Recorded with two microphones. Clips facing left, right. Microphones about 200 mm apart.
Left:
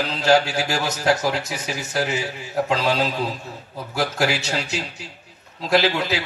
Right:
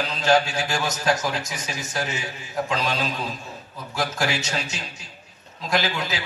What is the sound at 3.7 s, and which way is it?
A man's voice, 65° left (ahead or behind).